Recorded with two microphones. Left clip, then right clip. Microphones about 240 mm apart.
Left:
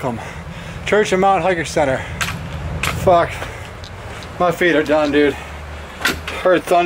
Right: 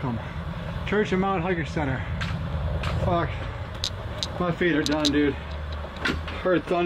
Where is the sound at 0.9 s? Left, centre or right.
Centre.